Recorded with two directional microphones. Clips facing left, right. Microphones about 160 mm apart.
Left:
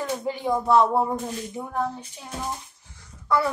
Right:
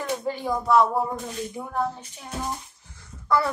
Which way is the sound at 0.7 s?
25° left (ahead or behind).